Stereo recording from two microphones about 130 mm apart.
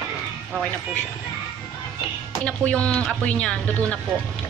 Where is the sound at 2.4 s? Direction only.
10° left (ahead or behind).